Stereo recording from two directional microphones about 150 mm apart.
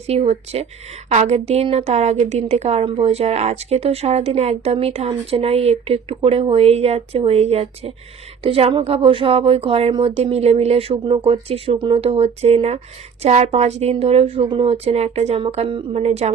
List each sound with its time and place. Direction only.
0.1 s a woman's voice: 45° right (ahead or behind)